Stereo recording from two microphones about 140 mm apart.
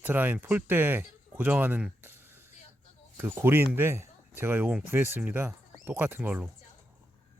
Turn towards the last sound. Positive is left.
turn(degrees=-10)  # may be behind; listen again after turning